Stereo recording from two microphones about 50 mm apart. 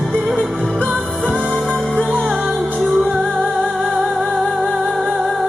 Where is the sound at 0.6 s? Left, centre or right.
Centre.